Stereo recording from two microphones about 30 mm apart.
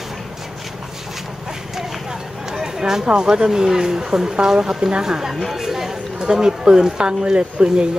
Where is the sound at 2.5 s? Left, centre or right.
Centre.